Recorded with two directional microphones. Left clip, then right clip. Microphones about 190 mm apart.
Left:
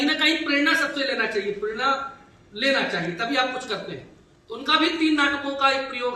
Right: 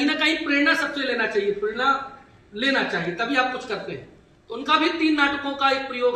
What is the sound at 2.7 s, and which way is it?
A man's voice, 5° left (ahead or behind).